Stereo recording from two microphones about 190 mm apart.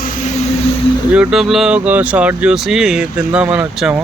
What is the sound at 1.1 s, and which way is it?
Speech, 5° right (ahead or behind).